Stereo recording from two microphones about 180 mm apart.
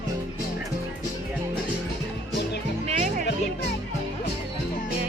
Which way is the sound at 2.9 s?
40° right (ahead or behind).